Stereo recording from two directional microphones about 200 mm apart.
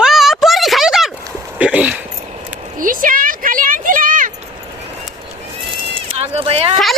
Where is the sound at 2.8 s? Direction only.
45° right (ahead or behind).